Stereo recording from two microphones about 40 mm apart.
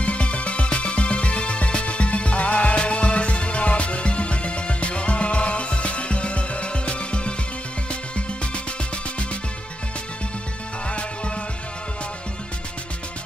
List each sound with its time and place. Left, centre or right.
0.0 s music: left
10.9 s music: left